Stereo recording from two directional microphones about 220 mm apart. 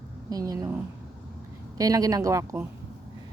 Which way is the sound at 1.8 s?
15° right (ahead or behind).